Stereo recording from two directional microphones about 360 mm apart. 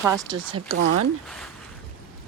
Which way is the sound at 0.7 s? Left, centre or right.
Right.